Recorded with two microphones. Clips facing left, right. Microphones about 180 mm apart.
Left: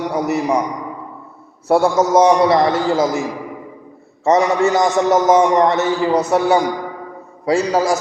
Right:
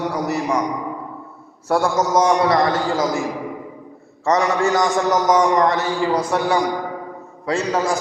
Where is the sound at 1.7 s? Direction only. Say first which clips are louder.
Left 4 dB; 25° left (ahead or behind).